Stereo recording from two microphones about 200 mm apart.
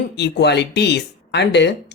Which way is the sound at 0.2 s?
55° left (ahead or behind).